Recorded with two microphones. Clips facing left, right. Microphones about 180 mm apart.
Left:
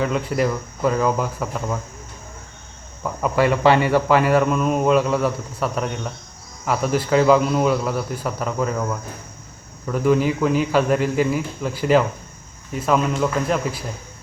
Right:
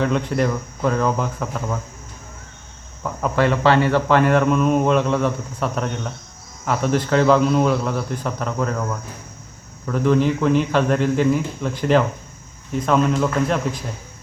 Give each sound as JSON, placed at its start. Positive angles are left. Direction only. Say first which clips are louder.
{"t": 0.0, "sound": "speech", "louder": "right 1 dB", "side_deg": 5}
{"t": 3.0, "sound": "speech", "louder": "even", "side_deg": 5}